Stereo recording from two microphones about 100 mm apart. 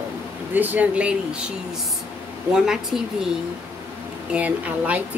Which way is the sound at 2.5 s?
5° right (ahead or behind).